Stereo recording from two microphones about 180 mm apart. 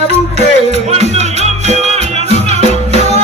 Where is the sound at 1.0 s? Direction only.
40° right (ahead or behind).